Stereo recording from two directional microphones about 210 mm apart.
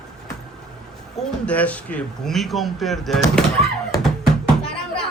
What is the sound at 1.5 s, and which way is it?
Speech, 5° left (ahead or behind).